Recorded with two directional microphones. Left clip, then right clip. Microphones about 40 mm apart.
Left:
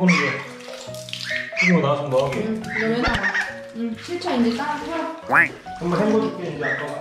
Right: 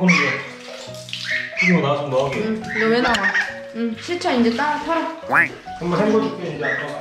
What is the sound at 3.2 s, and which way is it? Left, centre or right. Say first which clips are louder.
Fowl: right 3 dB; centre.